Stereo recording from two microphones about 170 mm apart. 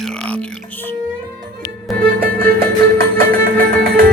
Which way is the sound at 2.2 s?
60° right (ahead or behind).